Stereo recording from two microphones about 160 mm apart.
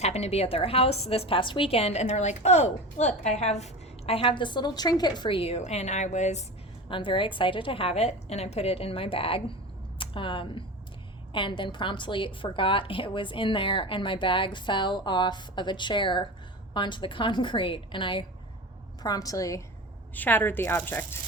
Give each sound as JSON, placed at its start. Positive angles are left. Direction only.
{"t": 0.0, "sound": "a woman's voice", "side_deg": 40}
{"t": 6.8, "sound": "a woman's voice", "side_deg": 30}